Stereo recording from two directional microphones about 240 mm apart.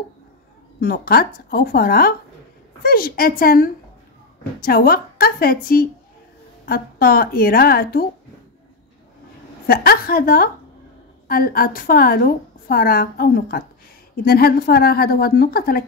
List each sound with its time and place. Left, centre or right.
0.7 s a woman's voice: left
9.7 s a woman's voice: left